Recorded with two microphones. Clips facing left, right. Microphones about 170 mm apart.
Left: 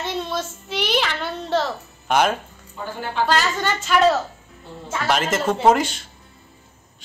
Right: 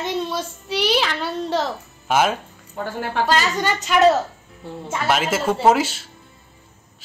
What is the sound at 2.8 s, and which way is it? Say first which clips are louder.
Speech: right 3 dB; 60° right (ahead or behind).